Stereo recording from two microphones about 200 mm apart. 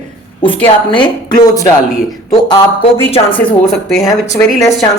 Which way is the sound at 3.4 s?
Centre (ahead or behind).